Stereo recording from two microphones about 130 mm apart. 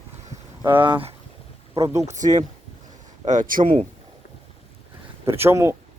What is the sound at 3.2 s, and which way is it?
Speech, 80° right.